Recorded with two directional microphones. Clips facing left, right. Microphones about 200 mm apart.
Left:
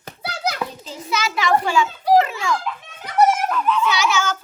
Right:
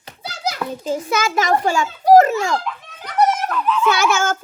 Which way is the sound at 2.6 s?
5° left (ahead or behind).